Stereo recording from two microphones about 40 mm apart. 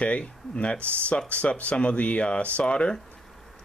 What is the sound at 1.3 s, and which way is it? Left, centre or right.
Speech, left.